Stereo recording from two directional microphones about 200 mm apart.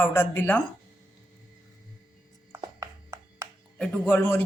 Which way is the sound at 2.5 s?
15° right (ahead or behind).